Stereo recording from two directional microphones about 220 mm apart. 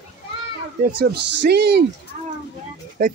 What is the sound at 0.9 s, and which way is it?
Speech, 50° right (ahead or behind).